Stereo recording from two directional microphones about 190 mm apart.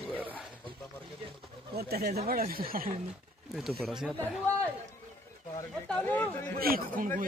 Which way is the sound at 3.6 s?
Centre (ahead or behind).